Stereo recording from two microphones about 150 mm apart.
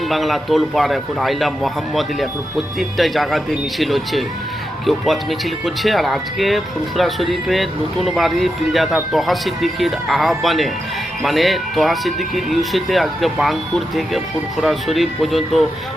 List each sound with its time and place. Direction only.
0.1 s speech: centre (ahead or behind)